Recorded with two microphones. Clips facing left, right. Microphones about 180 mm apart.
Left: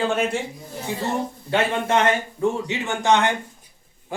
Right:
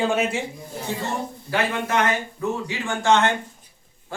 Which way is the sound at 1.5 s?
25° left (ahead or behind).